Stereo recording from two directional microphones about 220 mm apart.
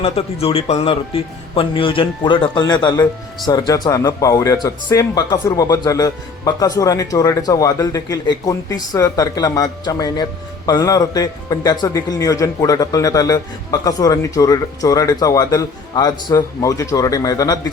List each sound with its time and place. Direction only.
0.0 s speech: 25° left (ahead or behind)